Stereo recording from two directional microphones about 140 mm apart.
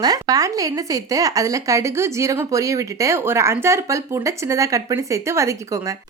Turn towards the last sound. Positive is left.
turn(degrees=-20)  # may be behind; listen again after turning